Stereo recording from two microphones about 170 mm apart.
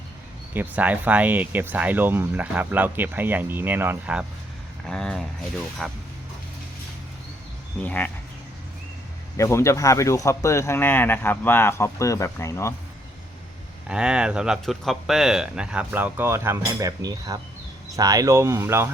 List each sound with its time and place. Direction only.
0.5 s speech: 10° right (ahead or behind)
7.8 s speech: 10° left (ahead or behind)
9.4 s speech: 15° left (ahead or behind)
13.8 s speech: 5° right (ahead or behind)